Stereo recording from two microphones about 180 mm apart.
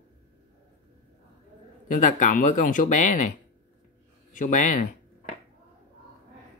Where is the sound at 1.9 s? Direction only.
45° left (ahead or behind).